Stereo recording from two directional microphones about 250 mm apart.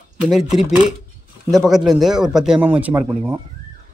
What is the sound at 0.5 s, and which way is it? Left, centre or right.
A man's voice, centre.